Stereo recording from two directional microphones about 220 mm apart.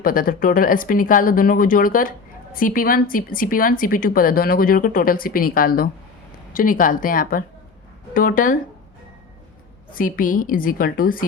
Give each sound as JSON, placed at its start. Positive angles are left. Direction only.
{"t": 0.0, "sound": "speech", "side_deg": 40}
{"t": 9.9, "sound": "speech", "side_deg": 40}